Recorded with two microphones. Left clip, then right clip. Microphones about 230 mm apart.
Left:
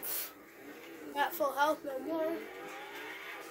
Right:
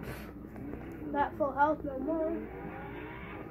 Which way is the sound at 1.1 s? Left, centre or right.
Left.